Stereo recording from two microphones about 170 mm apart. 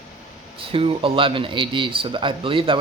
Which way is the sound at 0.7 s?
30° right (ahead or behind).